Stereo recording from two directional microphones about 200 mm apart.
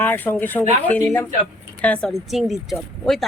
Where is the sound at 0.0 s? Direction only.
10° left (ahead or behind).